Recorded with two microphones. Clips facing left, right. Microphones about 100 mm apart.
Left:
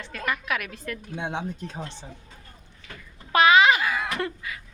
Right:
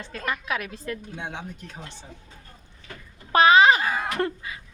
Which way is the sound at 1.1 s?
20° left (ahead or behind).